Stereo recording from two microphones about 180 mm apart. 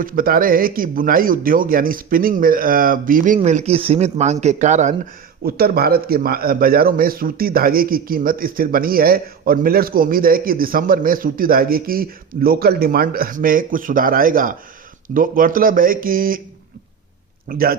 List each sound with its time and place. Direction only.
0.0 s speech: 50° right (ahead or behind)
5.4 s speech: 55° right (ahead or behind)
17.5 s speech: 55° right (ahead or behind)